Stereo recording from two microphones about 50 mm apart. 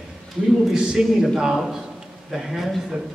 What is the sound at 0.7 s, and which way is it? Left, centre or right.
Speech, centre.